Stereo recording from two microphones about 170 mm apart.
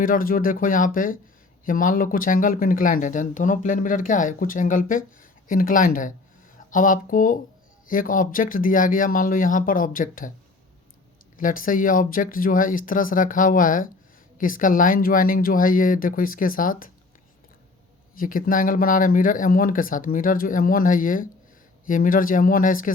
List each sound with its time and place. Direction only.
0.0 s speech: 55° left (ahead or behind)
11.3 s speech: 55° left (ahead or behind)
18.1 s speech: 55° left (ahead or behind)